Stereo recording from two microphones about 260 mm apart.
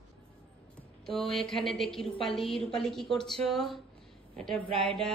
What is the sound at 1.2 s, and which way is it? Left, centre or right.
A woman's voice, centre.